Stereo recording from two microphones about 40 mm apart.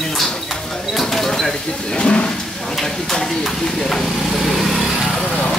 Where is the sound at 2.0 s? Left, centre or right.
Left.